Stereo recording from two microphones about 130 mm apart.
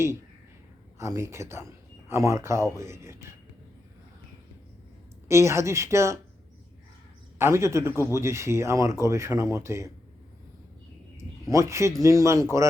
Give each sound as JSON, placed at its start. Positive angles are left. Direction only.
{"t": 0.9, "sound": "speech", "side_deg": -25}
{"t": 5.3, "sound": "speech", "side_deg": -20}
{"t": 7.3, "sound": "speech", "side_deg": -20}
{"t": 11.4, "sound": "speech", "side_deg": -25}